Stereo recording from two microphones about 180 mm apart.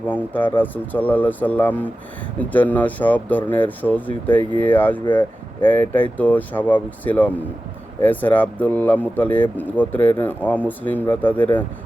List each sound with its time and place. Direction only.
0.1 s speech: 10° left (ahead or behind)